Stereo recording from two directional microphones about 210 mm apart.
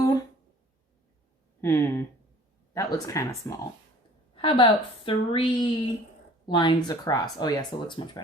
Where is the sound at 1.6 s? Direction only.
10° left (ahead or behind).